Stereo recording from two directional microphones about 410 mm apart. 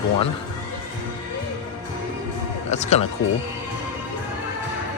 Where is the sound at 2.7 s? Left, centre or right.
Centre.